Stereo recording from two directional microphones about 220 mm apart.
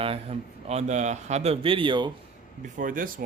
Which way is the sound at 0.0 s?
25° right (ahead or behind).